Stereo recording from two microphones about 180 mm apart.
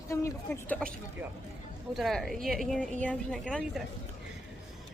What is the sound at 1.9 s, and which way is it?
A woman's voice, centre (ahead or behind).